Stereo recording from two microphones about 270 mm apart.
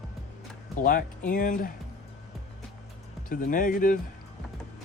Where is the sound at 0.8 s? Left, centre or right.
Left.